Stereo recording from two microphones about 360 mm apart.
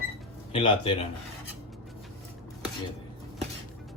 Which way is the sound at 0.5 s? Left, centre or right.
Centre.